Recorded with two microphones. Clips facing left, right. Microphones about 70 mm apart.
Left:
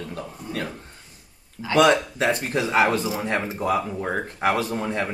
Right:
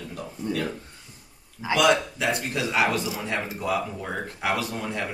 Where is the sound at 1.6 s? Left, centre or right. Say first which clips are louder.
Right 2 dB; centre.